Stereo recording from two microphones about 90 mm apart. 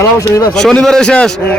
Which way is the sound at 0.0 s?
35° left (ahead or behind).